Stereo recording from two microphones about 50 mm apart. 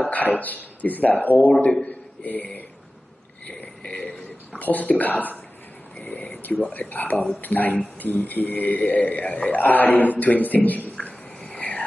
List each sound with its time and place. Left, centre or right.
0.1 s a man's voice: left
4.5 s a man's voice: left
11.0 s whispering: left